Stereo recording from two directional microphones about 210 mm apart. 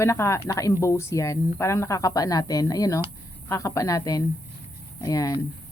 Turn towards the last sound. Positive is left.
turn(degrees=15)  # may be behind; listen again after turning